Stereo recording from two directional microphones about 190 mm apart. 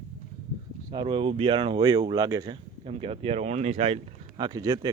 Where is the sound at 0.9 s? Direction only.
25° right (ahead or behind).